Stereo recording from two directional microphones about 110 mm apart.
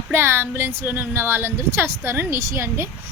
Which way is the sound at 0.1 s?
20° right (ahead or behind).